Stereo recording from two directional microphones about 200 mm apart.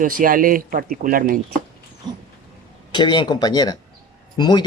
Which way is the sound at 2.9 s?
25° left (ahead or behind).